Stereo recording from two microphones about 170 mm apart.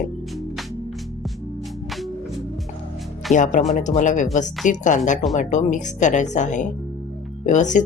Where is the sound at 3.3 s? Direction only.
45° left (ahead or behind).